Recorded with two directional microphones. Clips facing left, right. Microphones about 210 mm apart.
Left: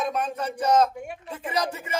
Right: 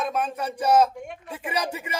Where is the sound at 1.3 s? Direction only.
10° right (ahead or behind).